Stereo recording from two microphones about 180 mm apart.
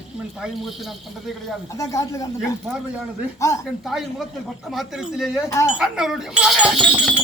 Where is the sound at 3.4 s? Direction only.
15° left (ahead or behind).